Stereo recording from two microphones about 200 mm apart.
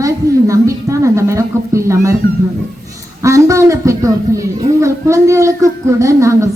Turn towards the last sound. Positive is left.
turn(degrees=-15)  # may be behind; listen again after turning